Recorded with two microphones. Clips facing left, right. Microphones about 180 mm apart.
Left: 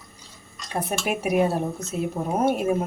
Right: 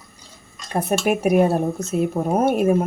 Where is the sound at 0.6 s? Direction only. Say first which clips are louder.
Right 6 dB; 50° right (ahead or behind).